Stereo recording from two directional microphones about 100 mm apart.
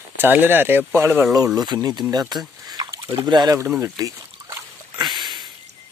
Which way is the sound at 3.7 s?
30° right (ahead or behind).